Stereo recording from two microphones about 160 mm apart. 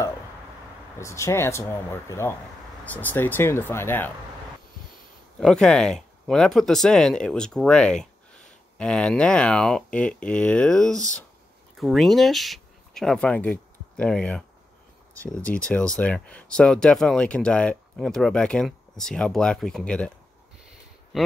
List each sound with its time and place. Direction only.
0.9 s speech: 20° left (ahead or behind)
5.4 s speech: 5° left (ahead or behind)